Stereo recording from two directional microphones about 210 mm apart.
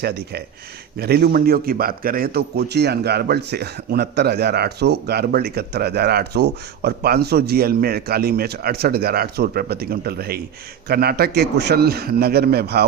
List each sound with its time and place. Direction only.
0.0 s a man's voice: 50° right (ahead or behind)